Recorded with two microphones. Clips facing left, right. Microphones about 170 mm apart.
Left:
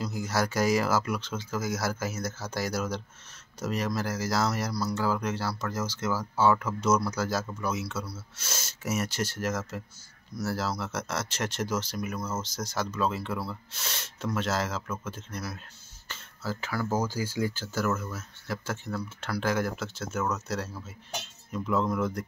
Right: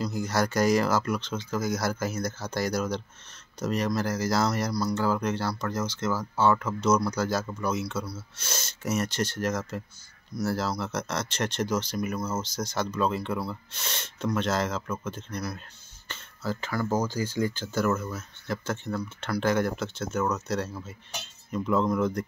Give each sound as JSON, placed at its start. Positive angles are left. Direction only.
{"t": 0.0, "sound": "speech", "side_deg": 5}